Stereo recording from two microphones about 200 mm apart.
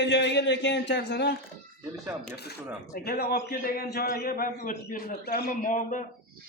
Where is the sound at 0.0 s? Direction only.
60° left (ahead or behind).